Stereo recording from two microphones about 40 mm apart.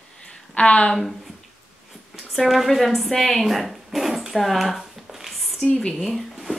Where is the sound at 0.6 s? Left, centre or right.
Left.